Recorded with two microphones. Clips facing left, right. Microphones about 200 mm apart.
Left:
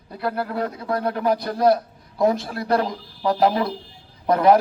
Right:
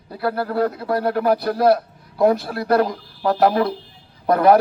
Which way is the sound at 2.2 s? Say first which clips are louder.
Right 3 dB; 5° right (ahead or behind).